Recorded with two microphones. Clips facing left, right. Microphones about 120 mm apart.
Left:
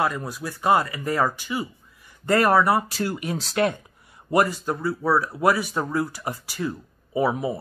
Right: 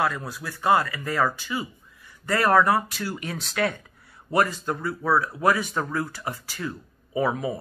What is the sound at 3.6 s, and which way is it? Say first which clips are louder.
Speech: left 3 dB; 20° left (ahead or behind).